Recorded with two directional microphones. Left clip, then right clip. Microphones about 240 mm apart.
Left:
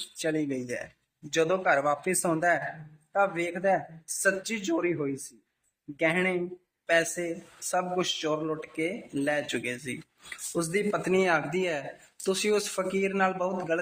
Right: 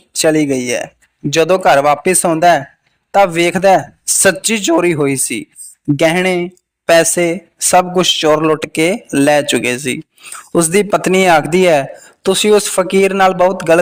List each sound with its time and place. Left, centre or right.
0.2 s speech: right